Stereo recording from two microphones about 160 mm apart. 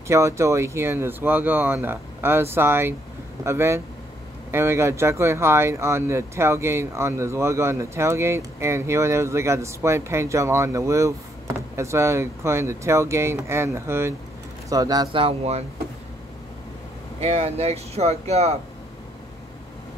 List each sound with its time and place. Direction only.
0.1 s speech: 20° right (ahead or behind)
15.2 s speech: 40° right (ahead or behind)
17.2 s speech: 40° right (ahead or behind)